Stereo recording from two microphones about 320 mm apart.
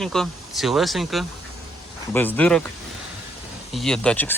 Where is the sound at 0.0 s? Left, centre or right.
Centre.